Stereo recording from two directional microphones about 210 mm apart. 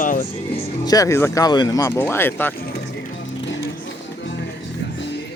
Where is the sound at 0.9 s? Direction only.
15° left (ahead or behind).